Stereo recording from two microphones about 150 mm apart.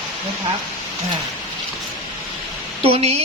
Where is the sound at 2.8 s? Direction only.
40° right (ahead or behind).